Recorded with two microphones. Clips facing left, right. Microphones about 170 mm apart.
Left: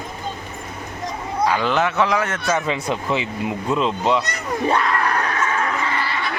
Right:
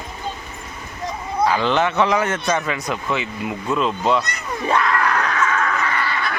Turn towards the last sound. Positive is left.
turn(degrees=25)  # may be behind; listen again after turning